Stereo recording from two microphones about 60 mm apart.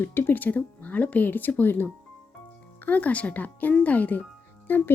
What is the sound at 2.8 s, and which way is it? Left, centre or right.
Speech, left.